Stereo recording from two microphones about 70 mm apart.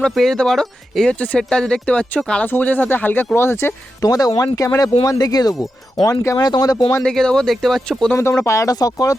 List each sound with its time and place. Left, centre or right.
0.1 s speech: centre; by 3.8 s left
4.0 s speech: left
4.8 s speech: left
7.0 s speech: centre
8.1 s speech: left
8.7 s speech: left